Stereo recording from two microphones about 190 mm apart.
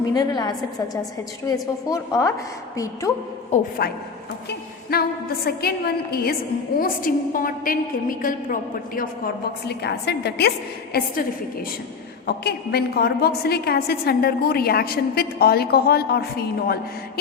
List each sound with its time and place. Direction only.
0.1 s a woman's voice: 20° left (ahead or behind)
3.5 s a woman's voice: 55° left (ahead or behind)
12.2 s a woman's voice: 55° left (ahead or behind)